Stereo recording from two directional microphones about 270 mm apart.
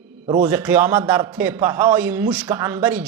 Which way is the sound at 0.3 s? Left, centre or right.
Centre.